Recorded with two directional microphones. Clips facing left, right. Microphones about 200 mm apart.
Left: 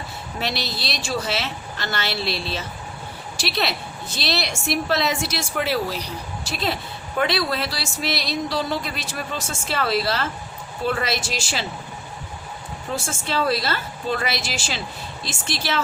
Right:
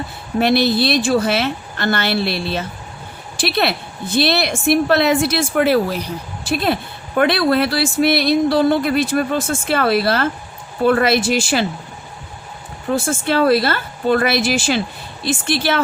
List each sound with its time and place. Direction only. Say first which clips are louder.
0.3 s a woman's voice: right 14 dB; 55° right (ahead or behind)
12.9 s a woman's voice: right 9 dB; 55° right (ahead or behind)